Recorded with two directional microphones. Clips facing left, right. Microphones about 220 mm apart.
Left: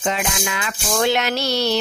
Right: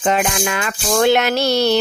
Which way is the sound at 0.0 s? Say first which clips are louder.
Right 5 dB; 55° right (ahead or behind).